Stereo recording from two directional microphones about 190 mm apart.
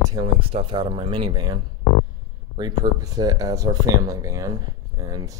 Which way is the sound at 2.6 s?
20° right (ahead or behind).